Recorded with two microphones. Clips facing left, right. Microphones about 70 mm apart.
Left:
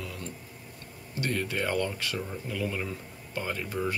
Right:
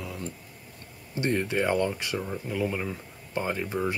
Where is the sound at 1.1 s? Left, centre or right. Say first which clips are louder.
Right 4 dB; right.